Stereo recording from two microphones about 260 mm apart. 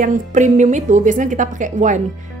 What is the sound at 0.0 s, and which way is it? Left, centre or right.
Speech, right.